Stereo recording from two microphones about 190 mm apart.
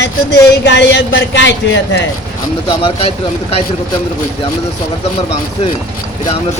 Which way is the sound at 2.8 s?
30° left (ahead or behind).